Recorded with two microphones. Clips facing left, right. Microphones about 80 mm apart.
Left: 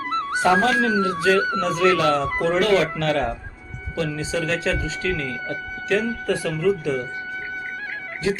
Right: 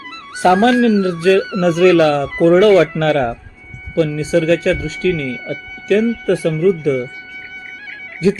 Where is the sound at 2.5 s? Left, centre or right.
Right.